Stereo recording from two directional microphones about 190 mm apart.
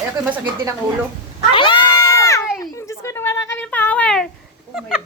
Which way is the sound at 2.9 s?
15° left (ahead or behind).